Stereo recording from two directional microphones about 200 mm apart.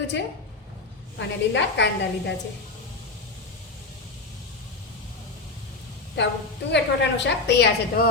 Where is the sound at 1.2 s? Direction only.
60° left (ahead or behind).